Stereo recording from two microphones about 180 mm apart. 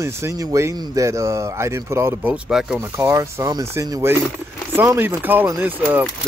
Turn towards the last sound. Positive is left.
turn(degrees=-10)  # may be behind; listen again after turning